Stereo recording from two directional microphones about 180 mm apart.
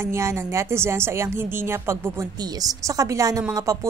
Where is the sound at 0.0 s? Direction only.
15° right (ahead or behind).